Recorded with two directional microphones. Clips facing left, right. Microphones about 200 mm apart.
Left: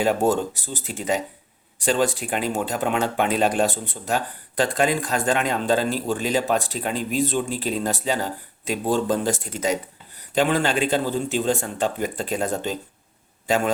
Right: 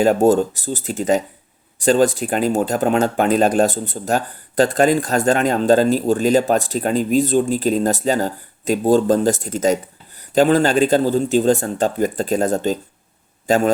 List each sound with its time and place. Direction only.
0.0 s speech: 45° right (ahead or behind)